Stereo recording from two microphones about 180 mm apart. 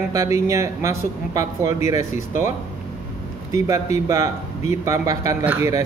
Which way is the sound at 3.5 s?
20° right (ahead or behind).